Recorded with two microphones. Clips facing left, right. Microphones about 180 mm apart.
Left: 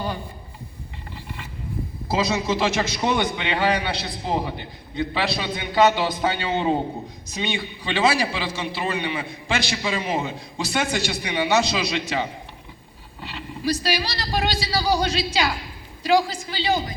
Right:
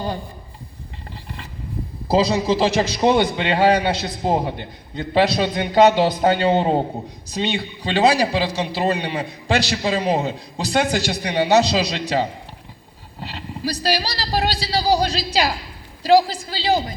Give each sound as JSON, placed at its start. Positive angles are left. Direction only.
{"t": 1.1, "sound": "vehicle", "side_deg": -35}
{"t": 2.0, "sound": "a man's voice", "side_deg": -35}